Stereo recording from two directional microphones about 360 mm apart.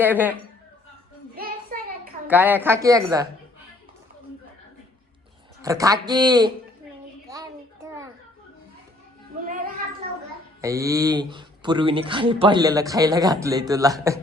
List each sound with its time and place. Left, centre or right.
0.0 s a woman's voice: centre
2.2 s speech: centre
5.6 s speech: centre
7.3 s a sound: centre
9.4 s a sound: right
10.6 s speech: centre